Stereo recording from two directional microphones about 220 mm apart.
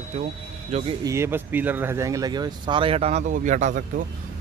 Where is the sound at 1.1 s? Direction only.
10° right (ahead or behind).